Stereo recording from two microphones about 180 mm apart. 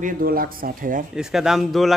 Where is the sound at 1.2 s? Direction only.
5° right (ahead or behind).